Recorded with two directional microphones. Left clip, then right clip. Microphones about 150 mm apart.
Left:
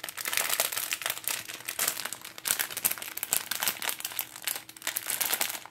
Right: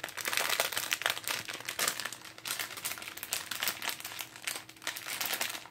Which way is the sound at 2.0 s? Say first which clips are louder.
Left 4 dB; 35° left (ahead or behind).